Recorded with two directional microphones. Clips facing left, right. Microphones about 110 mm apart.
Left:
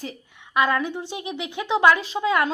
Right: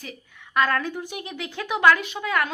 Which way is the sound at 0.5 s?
15° left (ahead or behind).